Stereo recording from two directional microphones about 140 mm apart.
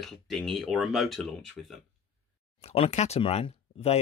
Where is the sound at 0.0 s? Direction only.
Centre (ahead or behind).